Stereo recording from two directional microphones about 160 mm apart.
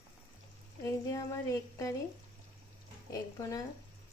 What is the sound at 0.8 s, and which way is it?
Speech, 20° left (ahead or behind).